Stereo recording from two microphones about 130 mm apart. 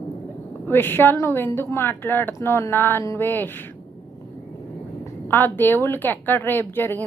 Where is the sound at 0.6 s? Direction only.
15° left (ahead or behind).